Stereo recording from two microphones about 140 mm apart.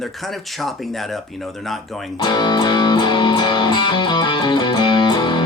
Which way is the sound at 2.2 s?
30° left (ahead or behind).